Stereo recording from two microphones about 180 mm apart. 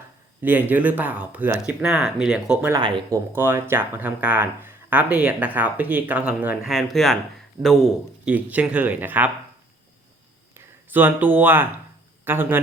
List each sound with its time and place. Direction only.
0.4 s speech: 10° right (ahead or behind)
2.7 s speech: 20° right (ahead or behind)
3.3 s speech: 10° right (ahead or behind)
8.2 s speech: 10° right (ahead or behind)
10.8 s speech: 10° right (ahead or behind)